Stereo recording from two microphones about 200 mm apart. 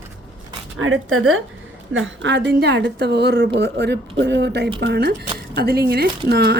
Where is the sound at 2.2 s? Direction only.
65° right (ahead or behind).